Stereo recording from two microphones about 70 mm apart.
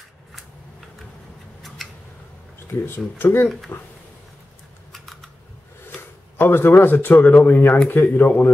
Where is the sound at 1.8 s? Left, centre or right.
Centre.